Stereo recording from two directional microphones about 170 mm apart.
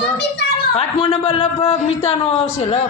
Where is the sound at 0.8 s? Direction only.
30° left (ahead or behind).